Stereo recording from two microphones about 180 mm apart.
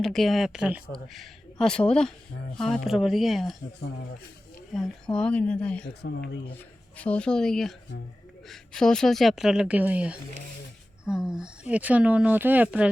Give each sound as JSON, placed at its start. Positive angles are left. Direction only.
{"t": 0.0, "sound": "speech", "side_deg": 0}
{"t": 5.1, "sound": "speech", "side_deg": 5}
{"t": 5.9, "sound": "speech", "side_deg": 70}
{"t": 6.9, "sound": "speech", "side_deg": 5}